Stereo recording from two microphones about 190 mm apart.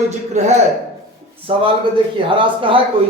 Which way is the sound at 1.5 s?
30° right (ahead or behind).